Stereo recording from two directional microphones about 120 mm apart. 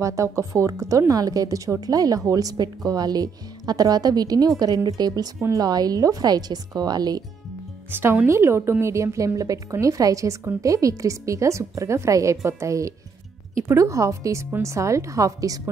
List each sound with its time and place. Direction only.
0.0 s a woman's voice: 25° right (ahead or behind)
7.9 s a woman's voice: 20° right (ahead or behind)